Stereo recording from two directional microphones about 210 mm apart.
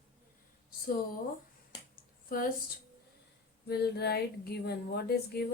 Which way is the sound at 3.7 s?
50° left (ahead or behind).